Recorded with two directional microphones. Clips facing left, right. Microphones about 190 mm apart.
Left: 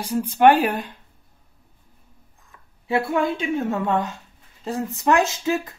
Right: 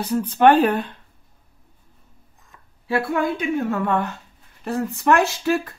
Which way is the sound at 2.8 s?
25° left (ahead or behind).